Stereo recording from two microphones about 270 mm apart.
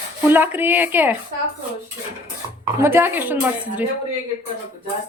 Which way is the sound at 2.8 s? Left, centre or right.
Centre.